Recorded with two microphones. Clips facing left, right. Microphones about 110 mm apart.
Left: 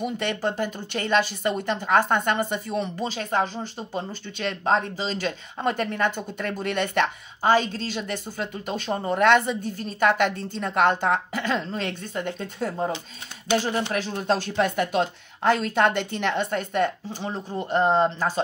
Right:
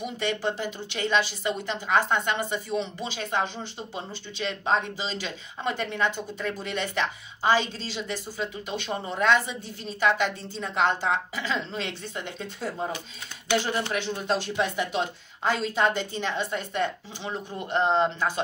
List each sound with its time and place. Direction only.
0.0 s speech: 50° left (ahead or behind)
13.9 s a woman's voice: 45° left (ahead or behind)
17.3 s speech: 35° left (ahead or behind)